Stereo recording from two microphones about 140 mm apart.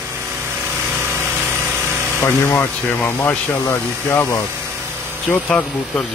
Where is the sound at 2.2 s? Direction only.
15° left (ahead or behind).